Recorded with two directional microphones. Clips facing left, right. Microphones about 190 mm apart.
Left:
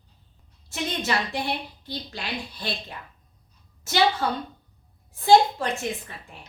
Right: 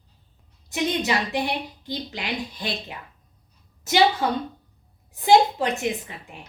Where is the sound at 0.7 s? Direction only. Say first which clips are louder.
Right 4 dB; 15° right (ahead or behind).